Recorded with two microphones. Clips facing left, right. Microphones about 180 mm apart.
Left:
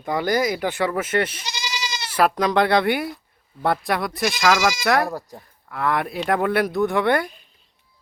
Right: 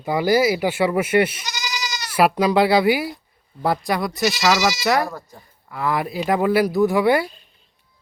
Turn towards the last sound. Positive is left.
turn(degrees=-5)  # may be behind; listen again after turning